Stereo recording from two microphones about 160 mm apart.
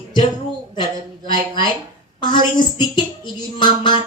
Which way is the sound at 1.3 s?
30° left (ahead or behind).